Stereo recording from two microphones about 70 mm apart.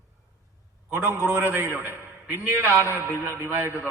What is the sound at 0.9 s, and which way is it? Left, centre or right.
A man's voice, right.